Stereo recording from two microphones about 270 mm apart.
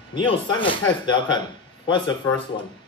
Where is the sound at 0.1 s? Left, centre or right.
Centre.